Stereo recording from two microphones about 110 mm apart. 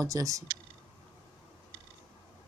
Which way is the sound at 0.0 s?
30° right (ahead or behind).